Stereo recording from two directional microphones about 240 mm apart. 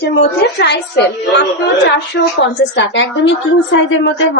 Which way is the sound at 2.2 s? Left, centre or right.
Left.